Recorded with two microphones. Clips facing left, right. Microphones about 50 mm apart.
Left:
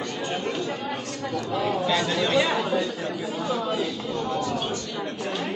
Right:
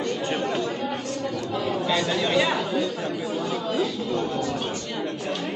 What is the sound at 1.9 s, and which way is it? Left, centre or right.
Speech, centre.